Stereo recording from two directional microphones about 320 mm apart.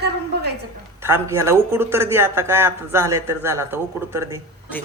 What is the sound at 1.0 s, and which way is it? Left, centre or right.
A man's voice, centre.